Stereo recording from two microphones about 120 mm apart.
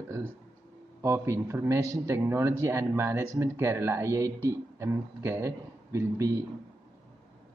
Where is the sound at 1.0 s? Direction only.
20° right (ahead or behind).